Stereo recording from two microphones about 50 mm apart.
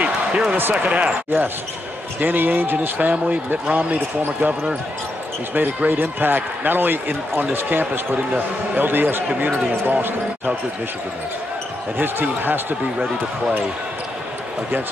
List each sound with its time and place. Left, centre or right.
0.0 s basketball bounce: right
0.7 s speech: right
2.1 s speech: right
5.5 s speech: right
12.0 s speech: right